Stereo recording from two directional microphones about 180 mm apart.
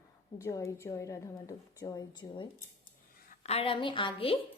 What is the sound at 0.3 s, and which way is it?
A woman's voice, 15° left (ahead or behind).